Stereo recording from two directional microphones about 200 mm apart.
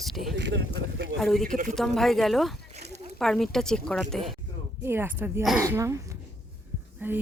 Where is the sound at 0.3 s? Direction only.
60° right (ahead or behind).